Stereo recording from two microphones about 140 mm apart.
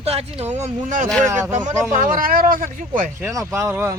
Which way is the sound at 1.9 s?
80° right.